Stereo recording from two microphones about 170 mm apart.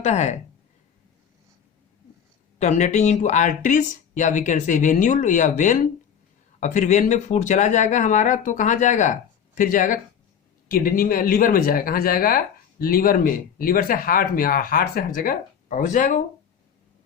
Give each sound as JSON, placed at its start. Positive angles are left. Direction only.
{"t": 0.0, "sound": "speech", "side_deg": 40}
{"t": 2.6, "sound": "speech", "side_deg": 45}